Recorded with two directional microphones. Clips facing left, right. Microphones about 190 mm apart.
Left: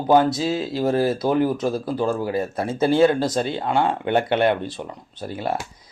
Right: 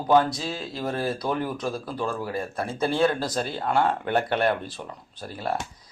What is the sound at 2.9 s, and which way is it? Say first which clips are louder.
Speech: left 6 dB; 30° left (ahead or behind).